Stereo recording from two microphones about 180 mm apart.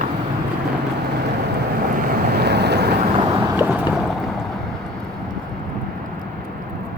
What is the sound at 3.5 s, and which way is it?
Boat, 10° right (ahead or behind).